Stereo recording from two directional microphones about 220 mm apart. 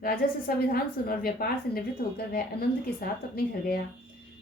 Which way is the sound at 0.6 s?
45° left (ahead or behind).